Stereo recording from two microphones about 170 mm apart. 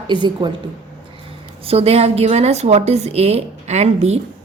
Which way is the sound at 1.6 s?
35° right (ahead or behind).